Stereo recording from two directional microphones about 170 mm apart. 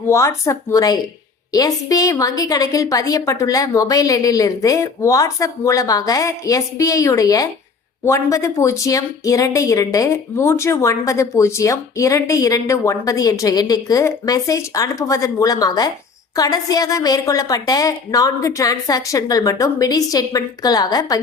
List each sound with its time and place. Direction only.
0.1 s speech: 15° left (ahead or behind)